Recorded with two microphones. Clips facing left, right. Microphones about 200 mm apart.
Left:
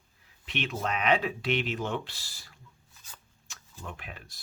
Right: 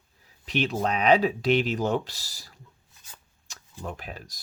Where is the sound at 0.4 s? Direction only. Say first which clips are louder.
Right 6 dB; 40° right (ahead or behind).